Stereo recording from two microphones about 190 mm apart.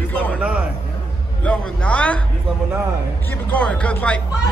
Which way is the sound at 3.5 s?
5° left (ahead or behind).